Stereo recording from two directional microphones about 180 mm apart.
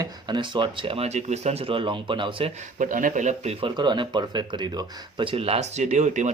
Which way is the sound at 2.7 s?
45° right (ahead or behind).